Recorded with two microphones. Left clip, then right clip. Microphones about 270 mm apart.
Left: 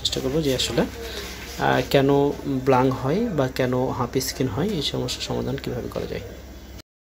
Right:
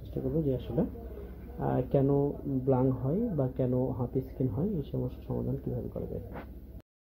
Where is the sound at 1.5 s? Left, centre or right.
Left.